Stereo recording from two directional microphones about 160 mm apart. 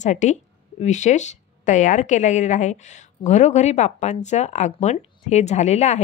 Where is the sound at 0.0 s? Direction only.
50° left (ahead or behind).